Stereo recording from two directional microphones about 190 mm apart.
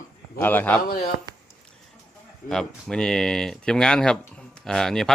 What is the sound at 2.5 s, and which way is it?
Speech, centre (ahead or behind).